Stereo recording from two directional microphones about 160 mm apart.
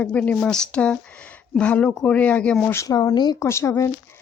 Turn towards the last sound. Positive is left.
turn(degrees=15)  # may be behind; listen again after turning